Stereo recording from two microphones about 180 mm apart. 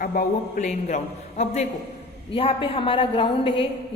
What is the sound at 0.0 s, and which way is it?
A man's voice, 50° left (ahead or behind).